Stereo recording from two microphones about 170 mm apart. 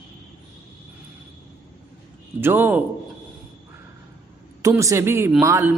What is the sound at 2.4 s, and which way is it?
Speech, 15° right (ahead or behind).